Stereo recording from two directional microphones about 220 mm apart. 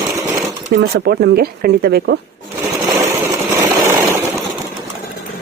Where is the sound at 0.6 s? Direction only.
45° right (ahead or behind).